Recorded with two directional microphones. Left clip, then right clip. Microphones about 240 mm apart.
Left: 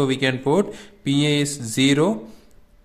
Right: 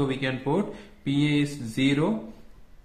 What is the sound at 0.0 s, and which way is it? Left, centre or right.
Speech, left.